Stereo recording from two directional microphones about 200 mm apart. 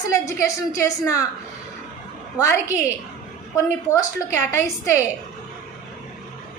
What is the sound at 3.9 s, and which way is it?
Speech, 15° left (ahead or behind).